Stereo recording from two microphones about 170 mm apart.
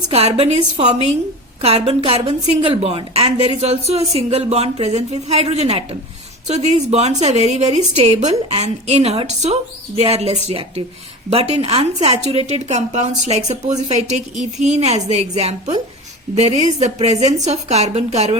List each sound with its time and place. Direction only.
0.1 s a woman's voice: 35° right (ahead or behind)